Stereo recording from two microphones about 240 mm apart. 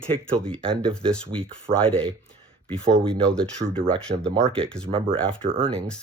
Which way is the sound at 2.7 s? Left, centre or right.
Centre.